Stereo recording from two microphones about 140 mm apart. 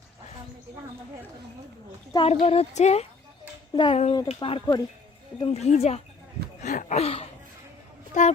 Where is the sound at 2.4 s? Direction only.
45° left (ahead or behind).